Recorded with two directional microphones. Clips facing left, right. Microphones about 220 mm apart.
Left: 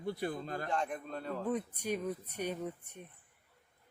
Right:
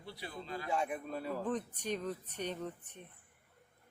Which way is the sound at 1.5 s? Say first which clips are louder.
Left 5 dB; 10° left (ahead or behind).